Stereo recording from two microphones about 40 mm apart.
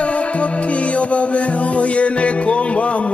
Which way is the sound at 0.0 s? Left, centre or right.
Left.